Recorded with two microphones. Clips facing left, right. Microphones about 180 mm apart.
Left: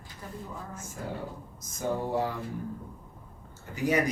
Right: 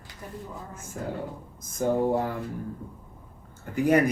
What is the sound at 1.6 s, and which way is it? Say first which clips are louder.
Speech: right 7 dB; 50° right (ahead or behind).